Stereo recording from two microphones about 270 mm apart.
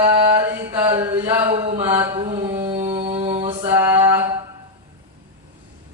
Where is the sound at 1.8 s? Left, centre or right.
Centre.